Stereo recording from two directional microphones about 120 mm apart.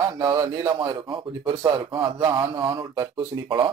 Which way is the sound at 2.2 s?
25° right (ahead or behind).